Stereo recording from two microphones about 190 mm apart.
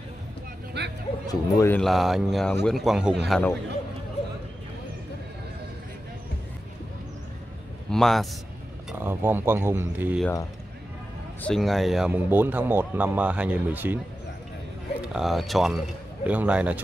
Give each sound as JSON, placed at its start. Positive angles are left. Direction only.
{"t": 0.8, "sound": "speech", "side_deg": -60}
{"t": 1.2, "sound": "speech", "side_deg": 15}
{"t": 1.8, "sound": "speech", "side_deg": 0}
{"t": 7.9, "sound": "a man's voice", "side_deg": 0}
{"t": 9.0, "sound": "speech", "side_deg": -10}
{"t": 11.4, "sound": "speech", "side_deg": 0}
{"t": 15.0, "sound": "speech", "side_deg": 0}